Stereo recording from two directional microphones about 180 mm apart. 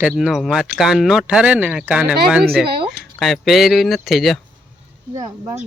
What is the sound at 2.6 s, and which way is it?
Speech, 60° right (ahead or behind).